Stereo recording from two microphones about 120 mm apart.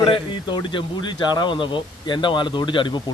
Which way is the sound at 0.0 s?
45° left (ahead or behind).